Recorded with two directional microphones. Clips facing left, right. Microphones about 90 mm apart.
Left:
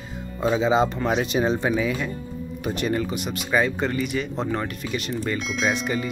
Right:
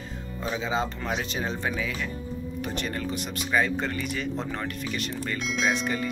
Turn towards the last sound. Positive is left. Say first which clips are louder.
# left 2 dB
turn(degrees=5)  # may be behind; listen again after turning